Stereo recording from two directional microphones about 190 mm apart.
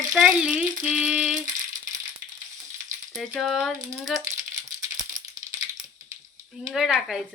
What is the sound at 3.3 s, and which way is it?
Speech, centre (ahead or behind).